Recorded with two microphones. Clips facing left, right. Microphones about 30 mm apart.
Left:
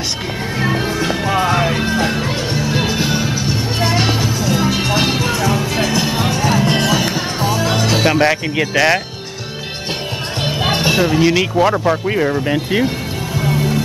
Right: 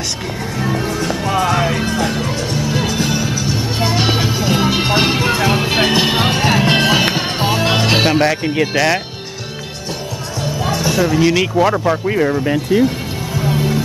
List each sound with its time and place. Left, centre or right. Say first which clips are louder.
0.6 s music: left 1 dB; left
0.9 s music: left 1 dB; centre
3.8 s music: even; centre
4.2 s music: right 1 dB; right
5.4 s music: right 2 dB; right
8.3 s a man's voice: even; centre
10.4 s music: left 2 dB; left
11.1 s speech: even; centre
12.5 s speech: right 2 dB; left
13.4 s music: even; centre